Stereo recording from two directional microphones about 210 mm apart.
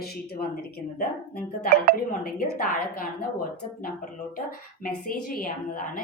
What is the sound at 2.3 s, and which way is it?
Speech, 45° left (ahead or behind).